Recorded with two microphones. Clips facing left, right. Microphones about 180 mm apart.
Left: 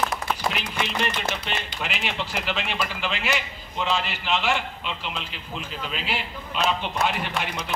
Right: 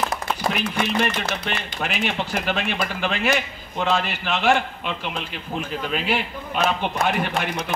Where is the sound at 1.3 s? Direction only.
50° right (ahead or behind).